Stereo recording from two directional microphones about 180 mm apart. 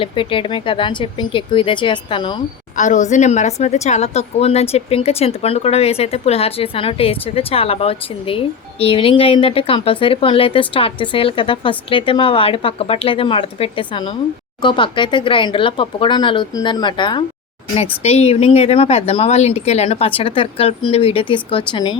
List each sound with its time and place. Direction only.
0.0 s speech: 30° left (ahead or behind)
2.7 s speech: 45° left (ahead or behind); by 21.9 s 25° left (ahead or behind)